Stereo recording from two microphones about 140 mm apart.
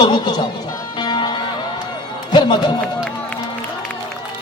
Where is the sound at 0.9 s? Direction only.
30° left (ahead or behind).